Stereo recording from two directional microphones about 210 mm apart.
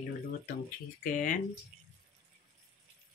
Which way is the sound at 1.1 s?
40° left (ahead or behind).